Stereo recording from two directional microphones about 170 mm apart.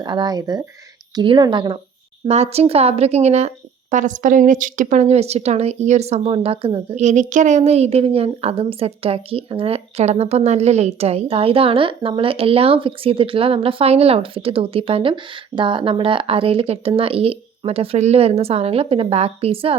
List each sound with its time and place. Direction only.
0.0 s speech: 25° right (ahead or behind)
2.2 s a woman's voice: 40° right (ahead or behind)